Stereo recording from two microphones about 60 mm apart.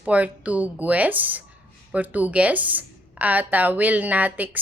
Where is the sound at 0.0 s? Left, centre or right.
Right.